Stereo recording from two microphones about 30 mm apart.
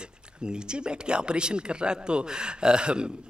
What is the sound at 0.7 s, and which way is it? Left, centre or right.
Speech, right.